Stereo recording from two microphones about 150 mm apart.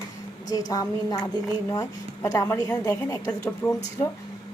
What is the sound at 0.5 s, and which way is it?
A woman's voice, 25° left (ahead or behind).